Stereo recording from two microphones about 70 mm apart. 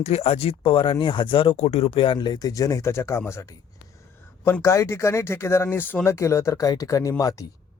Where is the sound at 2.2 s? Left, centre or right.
Left.